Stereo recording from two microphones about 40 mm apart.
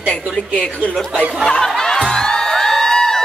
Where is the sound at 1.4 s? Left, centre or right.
Centre.